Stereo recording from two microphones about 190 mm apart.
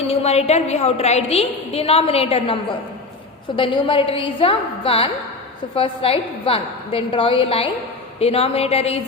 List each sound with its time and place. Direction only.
0.1 s a woman's voice: 35° left (ahead or behind)